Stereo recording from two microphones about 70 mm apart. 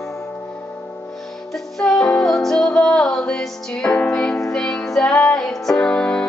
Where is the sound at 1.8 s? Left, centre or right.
Centre.